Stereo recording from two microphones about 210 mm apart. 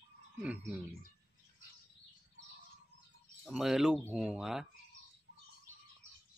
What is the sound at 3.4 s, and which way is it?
Speech, centre (ahead or behind).